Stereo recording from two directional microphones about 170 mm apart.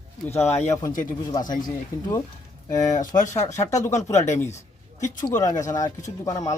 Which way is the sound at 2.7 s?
45° left (ahead or behind).